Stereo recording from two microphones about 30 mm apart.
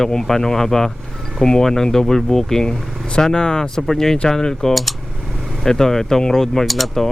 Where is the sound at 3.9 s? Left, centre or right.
Centre.